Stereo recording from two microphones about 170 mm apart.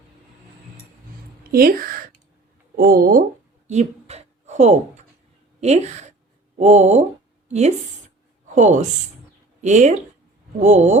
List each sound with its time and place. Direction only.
1.5 s speech: 60° right (ahead or behind)
3.7 s a sound: 40° right (ahead or behind)
5.5 s a woman's voice: 40° right (ahead or behind)